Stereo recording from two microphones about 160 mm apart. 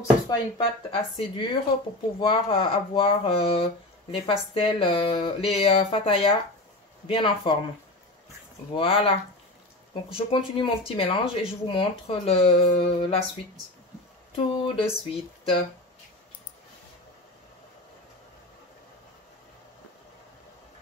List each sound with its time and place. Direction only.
0.8 s speech: 35° left (ahead or behind)
8.7 s speech: 35° left (ahead or behind)
14.3 s speech: 35° left (ahead or behind)